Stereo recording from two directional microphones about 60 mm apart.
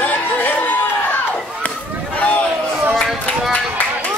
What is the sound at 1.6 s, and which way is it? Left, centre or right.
Chop, left.